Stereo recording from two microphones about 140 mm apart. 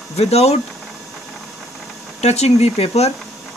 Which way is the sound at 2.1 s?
50° left (ahead or behind).